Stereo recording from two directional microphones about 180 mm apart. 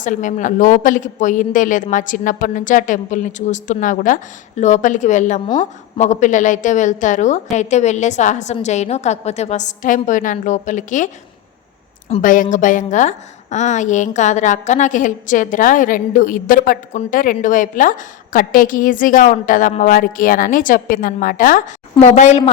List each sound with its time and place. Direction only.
0.0 s a woman's voice: 45° left (ahead or behind)